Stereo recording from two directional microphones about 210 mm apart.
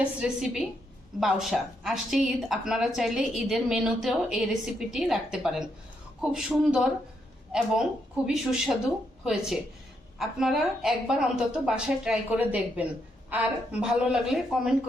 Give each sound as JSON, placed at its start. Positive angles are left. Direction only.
{"t": 0.2, "sound": "speech", "side_deg": 0}
{"t": 8.3, "sound": "speech", "side_deg": -5}